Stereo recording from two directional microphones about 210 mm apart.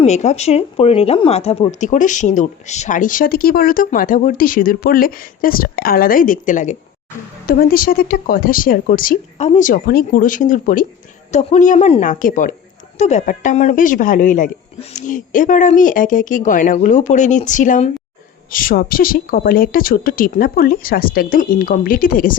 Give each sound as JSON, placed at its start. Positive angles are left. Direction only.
{"t": 0.0, "sound": "speech", "side_deg": 35}